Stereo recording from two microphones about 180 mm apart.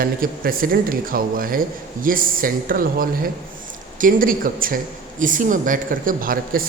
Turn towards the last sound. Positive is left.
turn(degrees=-50)  # may be behind; listen again after turning